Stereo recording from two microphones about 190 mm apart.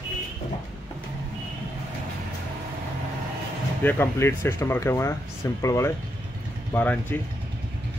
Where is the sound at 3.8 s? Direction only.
10° left (ahead or behind).